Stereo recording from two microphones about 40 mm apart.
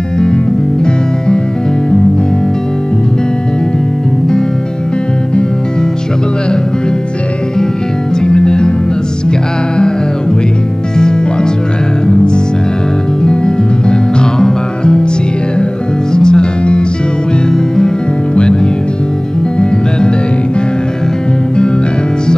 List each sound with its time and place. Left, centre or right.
8.2 s music: left
11.0 s music: centre
14.4 s music: left
16.1 s music: centre